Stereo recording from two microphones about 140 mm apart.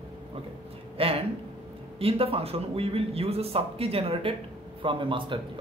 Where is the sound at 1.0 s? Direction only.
40° right (ahead or behind).